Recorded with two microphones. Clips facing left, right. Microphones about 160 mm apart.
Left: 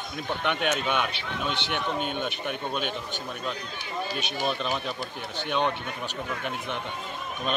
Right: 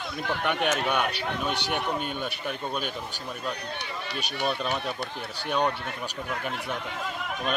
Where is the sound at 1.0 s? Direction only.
40° right (ahead or behind).